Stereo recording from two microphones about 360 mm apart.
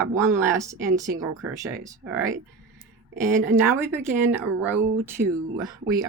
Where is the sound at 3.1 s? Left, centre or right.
Centre.